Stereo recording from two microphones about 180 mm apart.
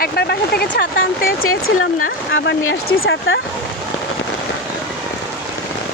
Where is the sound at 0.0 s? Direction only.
60° left (ahead or behind).